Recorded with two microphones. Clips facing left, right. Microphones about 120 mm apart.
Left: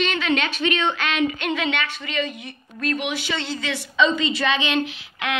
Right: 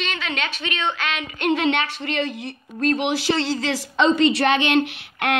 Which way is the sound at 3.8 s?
75° right (ahead or behind).